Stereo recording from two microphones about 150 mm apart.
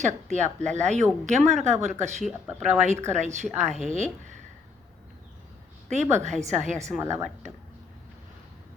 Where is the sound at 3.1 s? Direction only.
50° right (ahead or behind).